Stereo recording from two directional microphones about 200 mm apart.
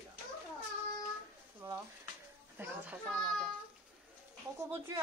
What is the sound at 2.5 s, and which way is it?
Speech, 10° right (ahead or behind).